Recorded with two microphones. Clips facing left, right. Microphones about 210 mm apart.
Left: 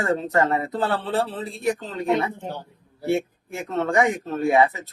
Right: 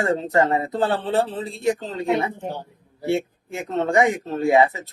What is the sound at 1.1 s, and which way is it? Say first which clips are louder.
Speech: right 3 dB; 20° right (ahead or behind).